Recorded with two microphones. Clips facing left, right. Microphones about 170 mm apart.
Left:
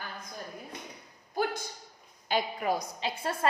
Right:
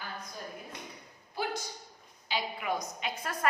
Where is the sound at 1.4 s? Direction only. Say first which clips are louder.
Left 5 dB; 45° left (ahead or behind).